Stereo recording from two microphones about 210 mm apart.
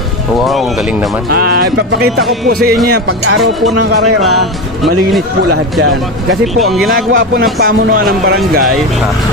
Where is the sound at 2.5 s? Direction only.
45° right (ahead or behind).